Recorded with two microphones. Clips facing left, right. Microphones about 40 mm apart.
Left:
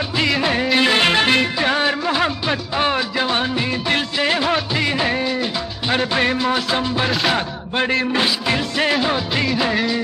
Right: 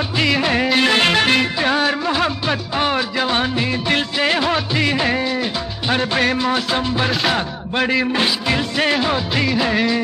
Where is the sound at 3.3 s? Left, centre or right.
Centre.